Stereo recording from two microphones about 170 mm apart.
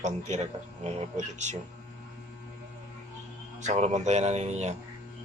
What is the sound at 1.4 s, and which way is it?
Speech, 45° right (ahead or behind).